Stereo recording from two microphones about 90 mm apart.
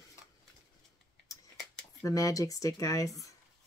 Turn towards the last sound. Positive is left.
turn(degrees=35)  # may be behind; listen again after turning